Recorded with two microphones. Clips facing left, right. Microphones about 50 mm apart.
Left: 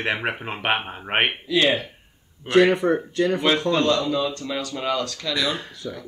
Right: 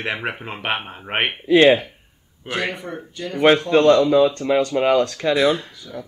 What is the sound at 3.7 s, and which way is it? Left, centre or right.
Speech, right.